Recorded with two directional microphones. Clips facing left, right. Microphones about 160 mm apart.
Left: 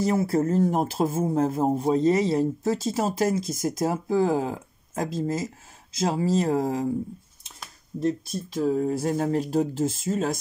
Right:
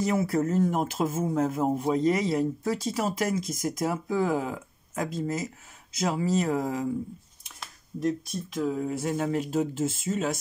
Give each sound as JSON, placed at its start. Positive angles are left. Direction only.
{"t": 0.0, "sound": "speech", "side_deg": 30}
{"t": 8.5, "sound": "speech", "side_deg": 35}